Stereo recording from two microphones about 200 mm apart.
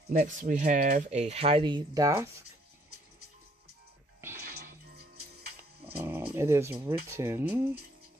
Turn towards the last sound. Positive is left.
turn(degrees=-10)  # may be behind; listen again after turning